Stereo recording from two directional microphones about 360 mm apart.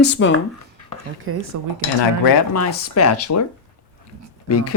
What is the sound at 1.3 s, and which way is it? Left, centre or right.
Speech, right.